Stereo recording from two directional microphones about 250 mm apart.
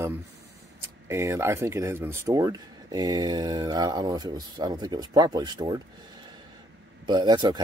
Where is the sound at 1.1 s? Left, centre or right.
Centre.